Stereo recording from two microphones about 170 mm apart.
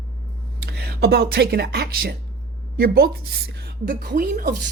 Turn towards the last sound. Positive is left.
turn(degrees=-55)  # may be behind; listen again after turning